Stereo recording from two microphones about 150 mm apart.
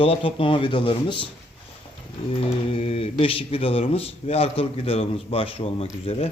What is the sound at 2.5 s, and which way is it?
Speech, 40° left (ahead or behind).